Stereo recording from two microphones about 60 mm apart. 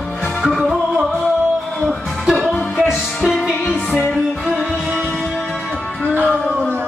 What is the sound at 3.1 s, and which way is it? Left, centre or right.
Music, centre.